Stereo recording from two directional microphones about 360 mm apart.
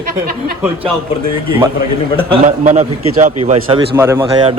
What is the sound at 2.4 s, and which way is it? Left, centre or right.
A man's voice, centre.